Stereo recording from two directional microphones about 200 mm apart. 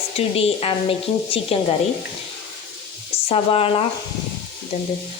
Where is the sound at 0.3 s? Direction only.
30° left (ahead or behind).